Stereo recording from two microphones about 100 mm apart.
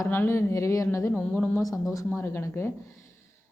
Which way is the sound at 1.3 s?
20° left (ahead or behind).